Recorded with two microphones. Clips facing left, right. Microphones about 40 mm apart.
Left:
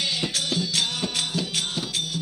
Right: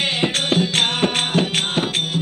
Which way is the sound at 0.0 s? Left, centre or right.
Right.